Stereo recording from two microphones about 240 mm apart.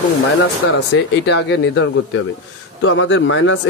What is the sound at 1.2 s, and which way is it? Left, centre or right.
Speech, left.